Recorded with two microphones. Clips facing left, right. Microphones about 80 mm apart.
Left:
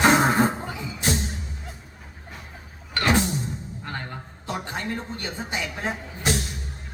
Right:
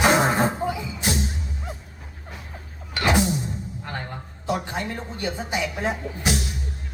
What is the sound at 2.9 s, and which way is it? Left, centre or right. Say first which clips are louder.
Music: right 1 dB; centre.